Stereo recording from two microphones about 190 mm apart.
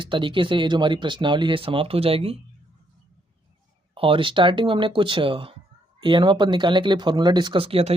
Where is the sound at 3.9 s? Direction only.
30° right (ahead or behind).